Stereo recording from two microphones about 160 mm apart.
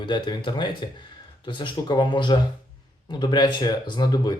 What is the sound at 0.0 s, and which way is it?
Speech, 30° left (ahead or behind).